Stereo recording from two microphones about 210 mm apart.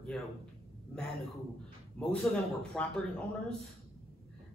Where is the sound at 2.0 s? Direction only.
5° left (ahead or behind).